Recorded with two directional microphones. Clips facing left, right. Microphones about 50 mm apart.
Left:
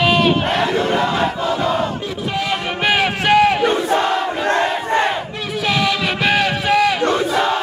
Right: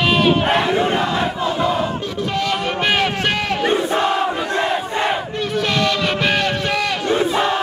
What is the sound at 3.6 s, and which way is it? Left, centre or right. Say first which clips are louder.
Crowd: left 1 dB; centre.